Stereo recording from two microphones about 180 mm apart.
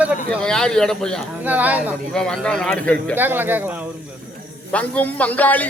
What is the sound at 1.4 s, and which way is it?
Speech, 10° right (ahead or behind).